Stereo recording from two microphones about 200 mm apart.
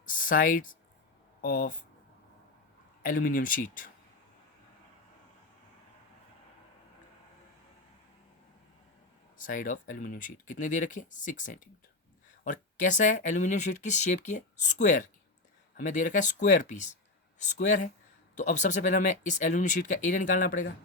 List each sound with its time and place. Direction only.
0.0 s speech: 45° left (ahead or behind)
3.0 s speech: 45° left (ahead or behind)
9.4 s speech: 40° left (ahead or behind)